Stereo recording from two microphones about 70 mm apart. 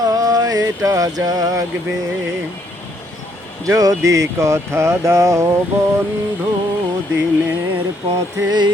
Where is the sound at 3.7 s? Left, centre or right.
Right.